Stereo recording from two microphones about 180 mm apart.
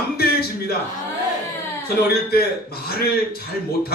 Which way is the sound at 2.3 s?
60° left (ahead or behind).